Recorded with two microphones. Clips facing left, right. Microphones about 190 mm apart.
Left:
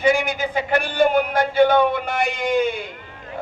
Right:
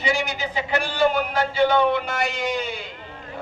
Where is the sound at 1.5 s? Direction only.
55° left (ahead or behind).